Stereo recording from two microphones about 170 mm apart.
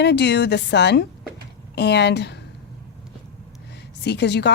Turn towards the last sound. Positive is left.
turn(degrees=90)